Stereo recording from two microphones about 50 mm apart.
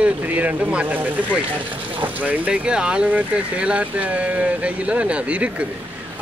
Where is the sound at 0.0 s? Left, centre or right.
Right.